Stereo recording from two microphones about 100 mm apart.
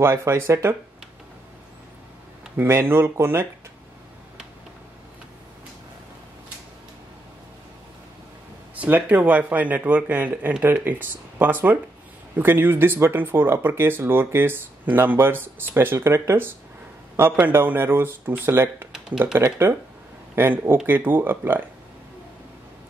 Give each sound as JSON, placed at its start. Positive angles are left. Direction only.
{"t": 0.0, "sound": "speech", "side_deg": -25}
{"t": 2.5, "sound": "speech", "side_deg": -25}
{"t": 8.7, "sound": "speech", "side_deg": -15}
{"t": 18.9, "sound": "a sound", "side_deg": -5}
{"t": 19.3, "sound": "speech", "side_deg": -25}
{"t": 20.7, "sound": "speech", "side_deg": -20}